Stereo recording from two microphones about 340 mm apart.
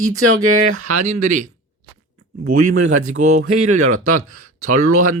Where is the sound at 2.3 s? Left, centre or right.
Right.